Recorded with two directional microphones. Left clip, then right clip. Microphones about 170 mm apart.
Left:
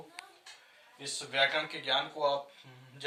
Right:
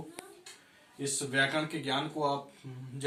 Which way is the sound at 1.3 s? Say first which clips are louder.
Left 1 dB; 10° left (ahead or behind).